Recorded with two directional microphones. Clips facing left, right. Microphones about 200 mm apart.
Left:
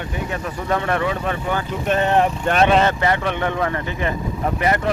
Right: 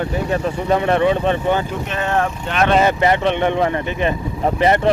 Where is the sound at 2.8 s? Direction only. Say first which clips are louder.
Right 4 dB; 20° right (ahead or behind).